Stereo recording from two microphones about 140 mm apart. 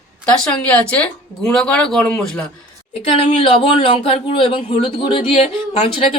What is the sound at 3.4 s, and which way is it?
Speech, 40° left (ahead or behind).